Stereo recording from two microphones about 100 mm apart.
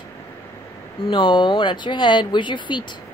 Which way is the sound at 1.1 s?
55° left (ahead or behind).